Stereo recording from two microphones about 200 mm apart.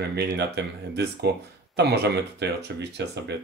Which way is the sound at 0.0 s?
55° right (ahead or behind).